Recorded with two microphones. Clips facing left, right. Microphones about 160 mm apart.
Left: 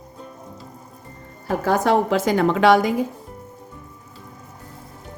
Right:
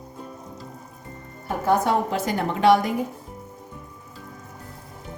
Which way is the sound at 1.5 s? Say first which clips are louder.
Left 2 dB; 90° left.